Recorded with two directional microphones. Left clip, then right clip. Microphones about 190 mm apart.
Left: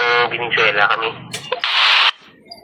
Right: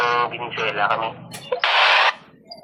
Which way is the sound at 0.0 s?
5° right (ahead or behind).